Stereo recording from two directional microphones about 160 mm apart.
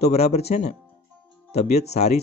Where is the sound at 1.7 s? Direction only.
40° left (ahead or behind).